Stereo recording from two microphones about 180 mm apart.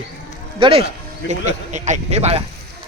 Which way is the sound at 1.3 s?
40° right (ahead or behind).